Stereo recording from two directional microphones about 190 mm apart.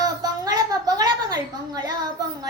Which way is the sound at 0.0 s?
20° right (ahead or behind).